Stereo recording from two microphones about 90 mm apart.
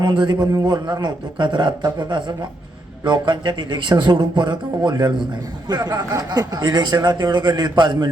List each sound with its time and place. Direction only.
0.0 s speech: 55° right (ahead or behind)